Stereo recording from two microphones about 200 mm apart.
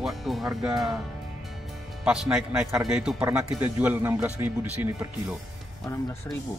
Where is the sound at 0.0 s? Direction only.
Centre (ahead or behind).